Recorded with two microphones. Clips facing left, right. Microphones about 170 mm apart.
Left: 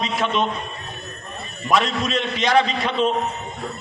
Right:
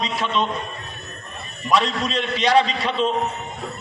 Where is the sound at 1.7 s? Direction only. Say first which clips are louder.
Even; 35° right (ahead or behind).